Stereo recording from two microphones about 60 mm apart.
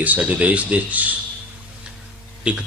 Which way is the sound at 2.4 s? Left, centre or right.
Centre.